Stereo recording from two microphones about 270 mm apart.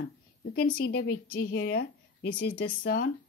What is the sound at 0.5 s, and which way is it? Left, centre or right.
A woman's voice, left.